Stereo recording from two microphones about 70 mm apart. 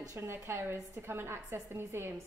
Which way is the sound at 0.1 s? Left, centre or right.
Right.